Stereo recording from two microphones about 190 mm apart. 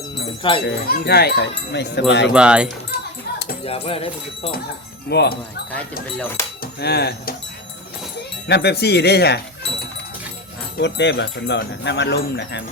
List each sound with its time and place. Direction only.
0.6 s speech: 55° left (ahead or behind)
2.3 s speech: 5° right (ahead or behind)
3.6 s music: 30° left (ahead or behind)
5.0 s speech: 60° left (ahead or behind)
8.4 s speech: 60° left (ahead or behind)
10.8 s speech: 65° left (ahead or behind)